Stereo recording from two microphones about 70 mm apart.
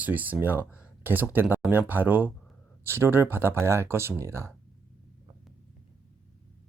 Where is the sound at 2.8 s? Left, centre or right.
Right.